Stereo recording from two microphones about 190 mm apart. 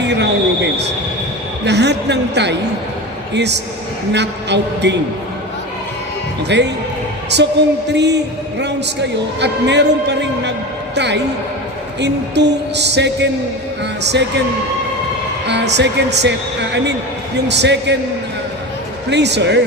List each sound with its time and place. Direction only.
0.0 s a sound: 65° right (ahead or behind)
1.6 s a man's voice: 65° right (ahead or behind)
6.5 s a man's voice: 65° right (ahead or behind)
15.4 s a man's voice: 65° right (ahead or behind)
19.1 s a man's voice: 65° right (ahead or behind)